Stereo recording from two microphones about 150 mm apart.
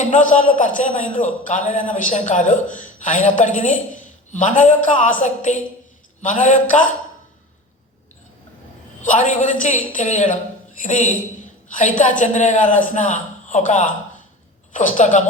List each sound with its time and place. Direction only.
0.1 s a man's voice: 60° left (ahead or behind)
9.0 s a man's voice: 55° left (ahead or behind)